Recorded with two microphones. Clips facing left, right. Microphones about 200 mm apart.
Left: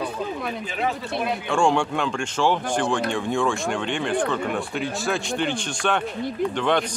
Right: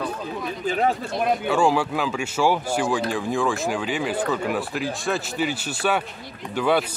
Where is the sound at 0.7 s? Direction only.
45° right (ahead or behind).